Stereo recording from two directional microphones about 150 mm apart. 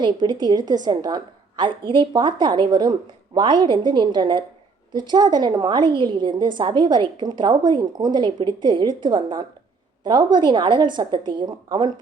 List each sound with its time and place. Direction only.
0.0 s a woman's voice: 30° right (ahead or behind)